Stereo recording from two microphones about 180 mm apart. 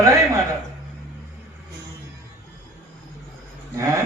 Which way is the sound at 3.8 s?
15° right (ahead or behind).